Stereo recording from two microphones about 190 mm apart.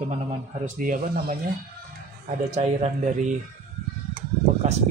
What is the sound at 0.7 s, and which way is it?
Speech, 45° right (ahead or behind).